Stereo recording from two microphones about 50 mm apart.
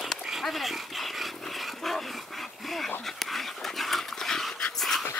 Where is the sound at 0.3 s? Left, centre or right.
Centre.